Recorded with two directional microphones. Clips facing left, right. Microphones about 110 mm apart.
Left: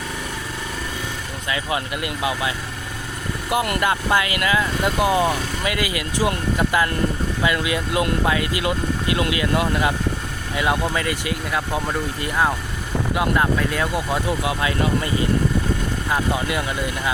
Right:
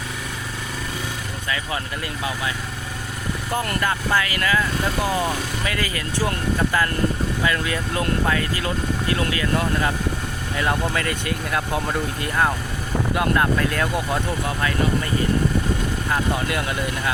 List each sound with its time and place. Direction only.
1.5 s speech: 20° left (ahead or behind)
3.5 s speech: 15° left (ahead or behind)
16.0 s speech: 5° left (ahead or behind)